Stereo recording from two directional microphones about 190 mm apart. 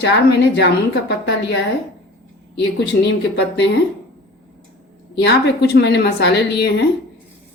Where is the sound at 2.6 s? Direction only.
65° left (ahead or behind).